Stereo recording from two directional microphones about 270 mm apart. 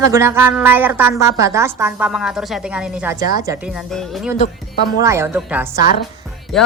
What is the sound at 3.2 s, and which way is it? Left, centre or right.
Speech, left.